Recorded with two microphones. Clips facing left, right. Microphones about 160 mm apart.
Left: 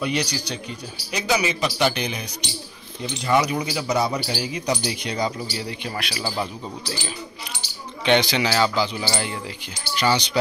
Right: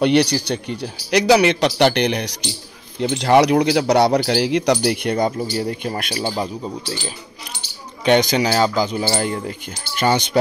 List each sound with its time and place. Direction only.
0.0 s speech: 65° right (ahead or behind); by 6.2 s 45° right (ahead or behind)
6.2 s speech: 30° right (ahead or behind)
8.0 s speech: 45° right (ahead or behind)